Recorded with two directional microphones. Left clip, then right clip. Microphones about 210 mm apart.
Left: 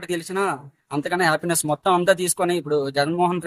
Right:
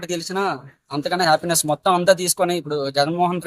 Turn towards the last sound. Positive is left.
turn(degrees=0)  # may be behind; listen again after turning